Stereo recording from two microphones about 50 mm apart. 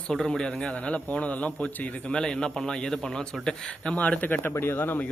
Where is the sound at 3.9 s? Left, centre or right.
Left.